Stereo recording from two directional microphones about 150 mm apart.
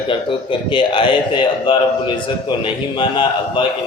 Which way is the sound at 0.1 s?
35° left (ahead or behind).